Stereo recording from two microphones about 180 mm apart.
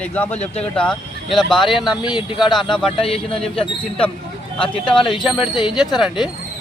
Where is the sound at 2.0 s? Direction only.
25° left (ahead or behind).